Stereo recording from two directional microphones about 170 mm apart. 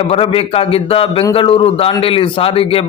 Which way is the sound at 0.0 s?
35° left (ahead or behind).